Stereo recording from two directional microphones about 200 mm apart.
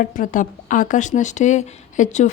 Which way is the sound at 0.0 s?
45° left (ahead or behind).